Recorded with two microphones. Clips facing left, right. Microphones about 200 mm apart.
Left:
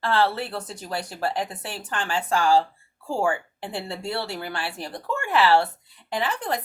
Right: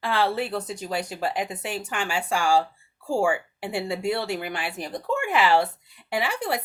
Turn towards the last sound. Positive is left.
turn(degrees=-10)  # may be behind; listen again after turning